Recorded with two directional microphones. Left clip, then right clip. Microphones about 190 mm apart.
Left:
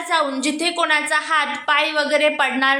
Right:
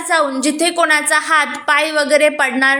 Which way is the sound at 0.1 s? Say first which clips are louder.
Right 5 dB; 15° right (ahead or behind).